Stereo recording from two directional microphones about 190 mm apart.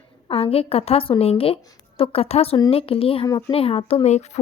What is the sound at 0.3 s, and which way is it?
A woman's voice, 30° left (ahead or behind).